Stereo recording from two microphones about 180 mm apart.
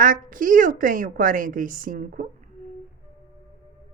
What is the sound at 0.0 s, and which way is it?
Speech, 50° right (ahead or behind).